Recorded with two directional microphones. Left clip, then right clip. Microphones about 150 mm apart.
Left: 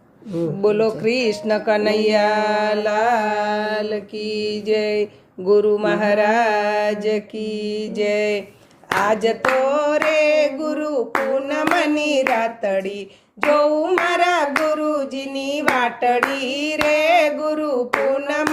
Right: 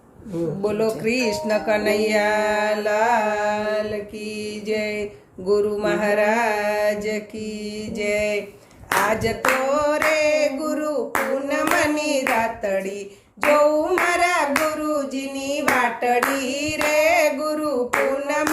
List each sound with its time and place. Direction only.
0.6 s speech: 30° left (ahead or behind)
11.4 s hands: 35° left (ahead or behind)
13.5 s speech: 30° left (ahead or behind)
18.3 s clapping: 35° left (ahead or behind)